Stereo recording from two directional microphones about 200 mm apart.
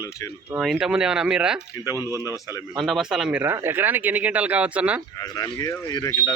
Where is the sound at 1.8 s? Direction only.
15° left (ahead or behind).